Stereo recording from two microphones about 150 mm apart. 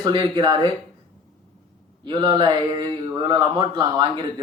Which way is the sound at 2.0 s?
30° right (ahead or behind).